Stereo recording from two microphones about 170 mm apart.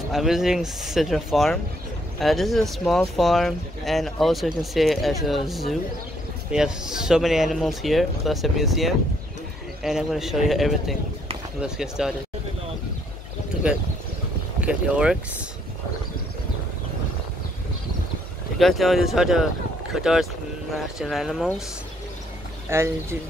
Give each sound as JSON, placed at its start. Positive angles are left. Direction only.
{"t": 0.1, "sound": "speech", "side_deg": 0}
{"t": 14.6, "sound": "speech", "side_deg": -5}
{"t": 18.6, "sound": "speech", "side_deg": 0}
{"t": 22.7, "sound": "speech", "side_deg": -15}